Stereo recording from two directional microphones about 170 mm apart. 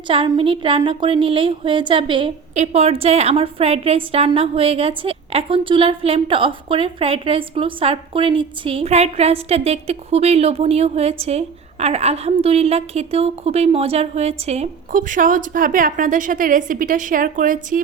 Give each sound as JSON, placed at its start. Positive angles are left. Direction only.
{"t": 0.1, "sound": "a woman's voice", "side_deg": -30}